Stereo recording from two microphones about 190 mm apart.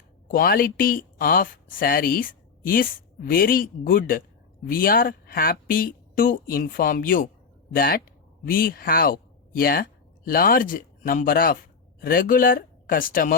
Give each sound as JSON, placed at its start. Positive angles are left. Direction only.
{"t": 0.3, "sound": "speech", "side_deg": 50}